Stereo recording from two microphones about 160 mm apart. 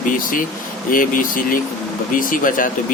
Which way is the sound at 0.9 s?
60° left (ahead or behind).